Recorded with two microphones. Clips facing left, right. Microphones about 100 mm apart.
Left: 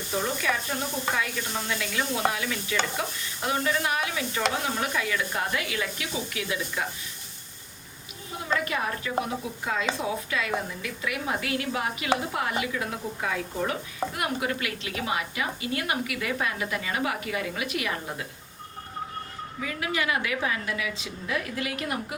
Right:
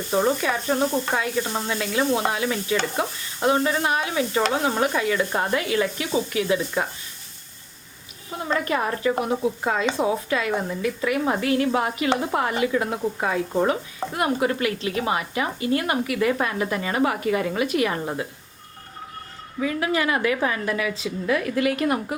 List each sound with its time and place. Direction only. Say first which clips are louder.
0.4 s a woman's voice: right 6 dB; 30° right (ahead or behind)
8.4 s a woman's voice: right 4 dB; 40° right (ahead or behind)
19.6 s a woman's voice: right 6 dB; 35° right (ahead or behind)